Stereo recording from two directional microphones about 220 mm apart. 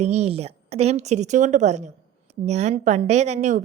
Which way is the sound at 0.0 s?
30° right (ahead or behind).